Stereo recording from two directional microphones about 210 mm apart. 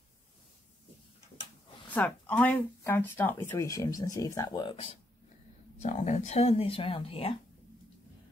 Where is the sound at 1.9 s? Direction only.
5° left (ahead or behind); by 7.3 s 25° left (ahead or behind).